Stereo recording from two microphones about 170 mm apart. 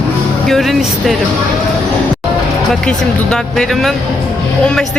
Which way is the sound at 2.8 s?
5° left (ahead or behind).